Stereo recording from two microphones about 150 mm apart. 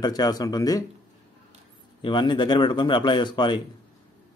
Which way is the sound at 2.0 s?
30° left (ahead or behind).